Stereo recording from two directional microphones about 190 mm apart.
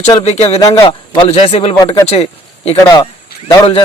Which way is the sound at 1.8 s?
20° left (ahead or behind).